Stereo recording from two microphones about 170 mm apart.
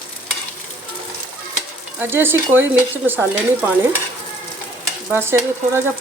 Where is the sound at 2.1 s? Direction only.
10° right (ahead or behind).